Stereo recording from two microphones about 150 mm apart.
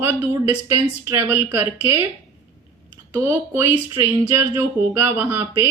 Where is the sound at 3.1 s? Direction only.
15° right (ahead or behind).